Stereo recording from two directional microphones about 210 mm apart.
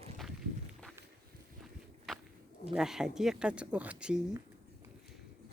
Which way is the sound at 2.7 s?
Centre (ahead or behind).